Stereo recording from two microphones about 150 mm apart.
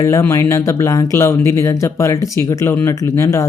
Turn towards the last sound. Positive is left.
turn(degrees=20)  # may be behind; listen again after turning